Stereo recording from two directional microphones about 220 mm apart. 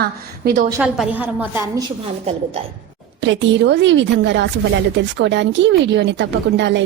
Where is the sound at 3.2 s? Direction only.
55° right (ahead or behind).